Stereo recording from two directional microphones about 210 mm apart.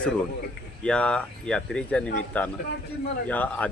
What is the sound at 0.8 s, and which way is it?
Speech, 5° left (ahead or behind).